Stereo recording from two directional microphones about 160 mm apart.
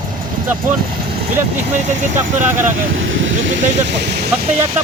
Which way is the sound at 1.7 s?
50° right (ahead or behind).